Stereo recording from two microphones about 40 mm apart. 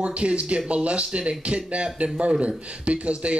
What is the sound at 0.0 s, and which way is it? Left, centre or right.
Speech, right.